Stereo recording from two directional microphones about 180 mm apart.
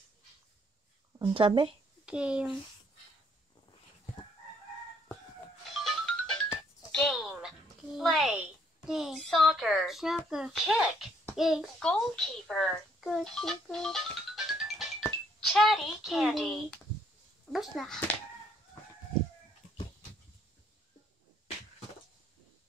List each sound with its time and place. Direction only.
1.2 s speech: 30° right (ahead or behind)
2.0 s speech: 5° right (ahead or behind)
5.7 s music: centre (ahead or behind)
11.3 s a child's voice: centre (ahead or behind)